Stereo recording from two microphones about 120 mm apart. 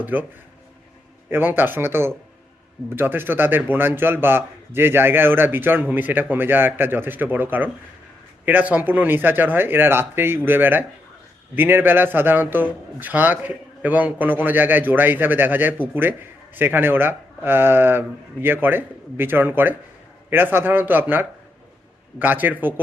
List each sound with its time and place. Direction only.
0.0 s a man's voice: 15° right (ahead or behind)
1.3 s a man's voice: 15° right (ahead or behind)